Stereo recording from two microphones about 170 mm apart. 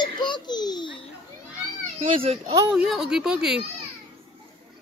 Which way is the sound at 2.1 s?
35° right (ahead or behind).